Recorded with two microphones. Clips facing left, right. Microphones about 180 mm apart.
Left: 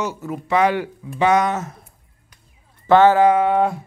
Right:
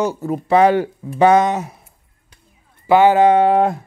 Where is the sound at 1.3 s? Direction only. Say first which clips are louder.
Right 4 dB; 15° right (ahead or behind).